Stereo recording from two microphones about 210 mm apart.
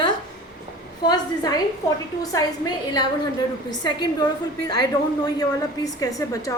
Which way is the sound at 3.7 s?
20° left (ahead or behind).